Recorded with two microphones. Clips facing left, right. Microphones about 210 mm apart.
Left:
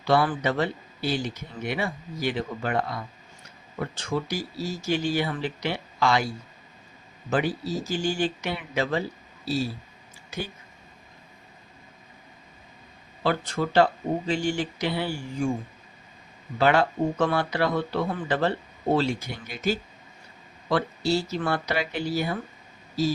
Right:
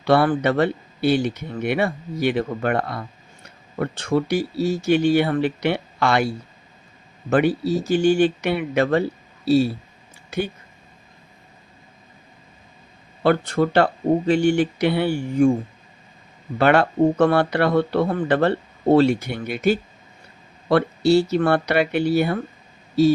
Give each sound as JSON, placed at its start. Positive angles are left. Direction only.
{"t": 0.0, "sound": "speech", "side_deg": -60}
{"t": 13.2, "sound": "speech", "side_deg": -60}
{"t": 16.6, "sound": "speech", "side_deg": -60}